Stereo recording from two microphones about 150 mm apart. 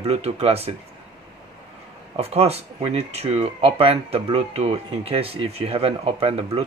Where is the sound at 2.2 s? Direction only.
40° right (ahead or behind).